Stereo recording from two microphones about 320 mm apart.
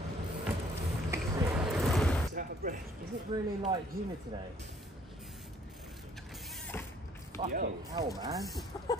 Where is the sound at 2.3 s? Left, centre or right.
Right.